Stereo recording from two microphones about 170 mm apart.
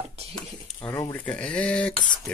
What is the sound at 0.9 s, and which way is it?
Speech, 15° left (ahead or behind).